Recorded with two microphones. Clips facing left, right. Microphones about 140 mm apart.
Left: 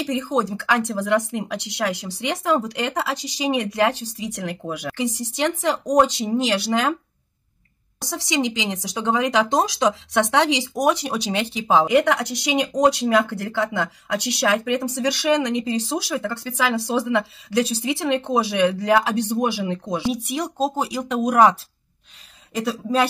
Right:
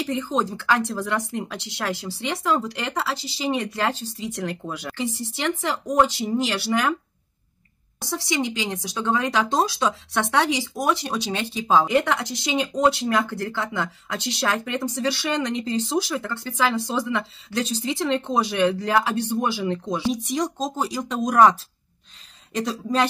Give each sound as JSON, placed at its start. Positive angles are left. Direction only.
{"t": 0.1, "sound": "speech", "side_deg": 15}
{"t": 8.0, "sound": "speech", "side_deg": 15}